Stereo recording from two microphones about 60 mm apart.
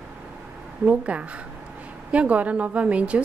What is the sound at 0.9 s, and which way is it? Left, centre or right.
A woman's voice, right.